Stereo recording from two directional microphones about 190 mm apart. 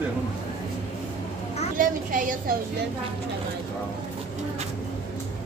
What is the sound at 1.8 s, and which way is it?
Speech, 45° right (ahead or behind).